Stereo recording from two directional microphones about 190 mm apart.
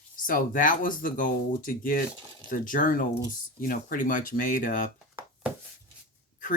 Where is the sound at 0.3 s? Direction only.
45° left (ahead or behind).